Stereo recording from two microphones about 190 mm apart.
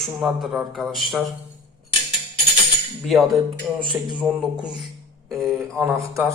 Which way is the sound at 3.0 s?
Centre (ahead or behind).